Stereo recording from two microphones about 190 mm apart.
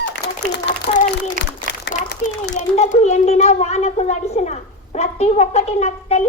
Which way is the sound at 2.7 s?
35° left (ahead or behind).